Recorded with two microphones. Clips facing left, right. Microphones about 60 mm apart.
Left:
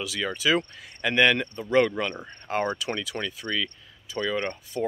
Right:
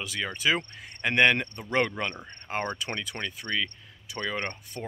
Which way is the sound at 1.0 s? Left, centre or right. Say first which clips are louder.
Left 1 dB; right.